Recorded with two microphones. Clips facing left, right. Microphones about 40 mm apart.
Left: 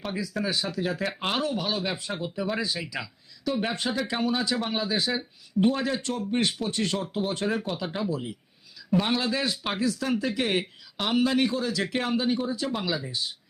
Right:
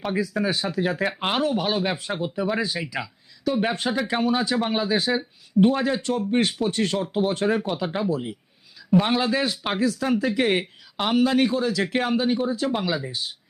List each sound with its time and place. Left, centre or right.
0.0 s speech: centre